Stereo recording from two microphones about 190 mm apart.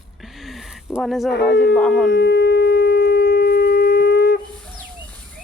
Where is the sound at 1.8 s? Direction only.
Centre (ahead or behind).